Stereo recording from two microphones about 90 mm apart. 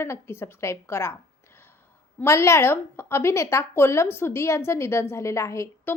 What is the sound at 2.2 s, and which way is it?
A woman's voice, 30° left (ahead or behind).